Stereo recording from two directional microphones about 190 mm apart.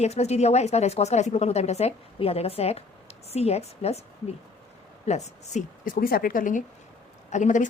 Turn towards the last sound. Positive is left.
turn(degrees=40)  # may be behind; listen again after turning